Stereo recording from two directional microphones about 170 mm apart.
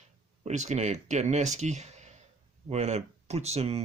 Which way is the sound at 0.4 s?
40° right (ahead or behind).